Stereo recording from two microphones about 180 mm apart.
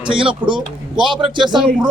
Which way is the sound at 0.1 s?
30° right (ahead or behind).